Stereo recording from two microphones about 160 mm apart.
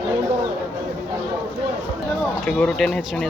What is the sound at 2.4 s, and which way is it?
Speech, 5° left (ahead or behind).